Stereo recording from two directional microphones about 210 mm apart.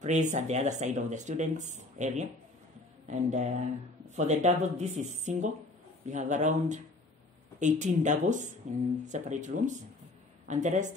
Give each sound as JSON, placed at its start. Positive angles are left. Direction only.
{"t": 0.0, "sound": "speech", "side_deg": -35}